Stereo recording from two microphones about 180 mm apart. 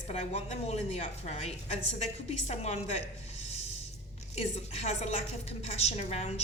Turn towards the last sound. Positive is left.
turn(degrees=35)  # may be behind; listen again after turning